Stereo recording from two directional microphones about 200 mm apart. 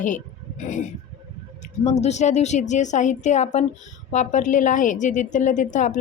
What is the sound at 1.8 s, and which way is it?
A woman's voice, 35° left (ahead or behind).